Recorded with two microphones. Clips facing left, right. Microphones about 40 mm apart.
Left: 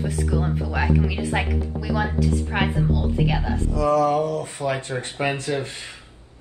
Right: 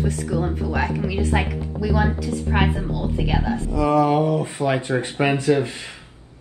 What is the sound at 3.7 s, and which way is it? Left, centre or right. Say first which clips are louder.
Speech: right 1 dB; right.